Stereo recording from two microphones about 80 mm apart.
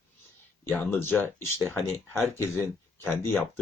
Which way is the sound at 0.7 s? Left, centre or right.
Left.